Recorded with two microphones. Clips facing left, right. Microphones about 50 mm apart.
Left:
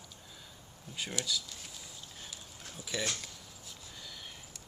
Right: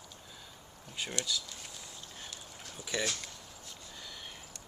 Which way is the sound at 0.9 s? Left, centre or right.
Centre.